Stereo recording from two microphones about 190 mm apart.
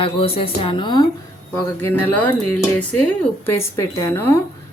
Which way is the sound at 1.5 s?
10° left (ahead or behind).